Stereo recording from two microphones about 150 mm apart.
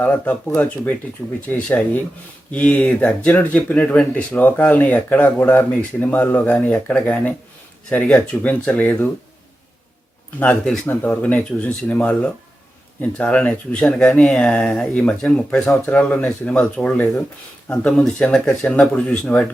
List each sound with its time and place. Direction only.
0.0 s speech: 10° left (ahead or behind)
10.4 s speech: 5° left (ahead or behind)